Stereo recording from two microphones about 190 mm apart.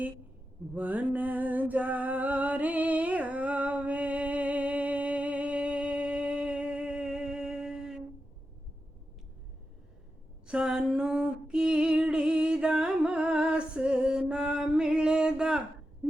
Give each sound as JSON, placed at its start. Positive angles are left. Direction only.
{"t": 0.7, "sound": "music", "side_deg": -10}
{"t": 10.4, "sound": "female singing", "side_deg": -5}